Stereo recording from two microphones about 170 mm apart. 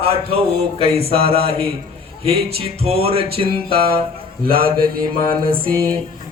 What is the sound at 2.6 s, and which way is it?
Music, 35° right (ahead or behind).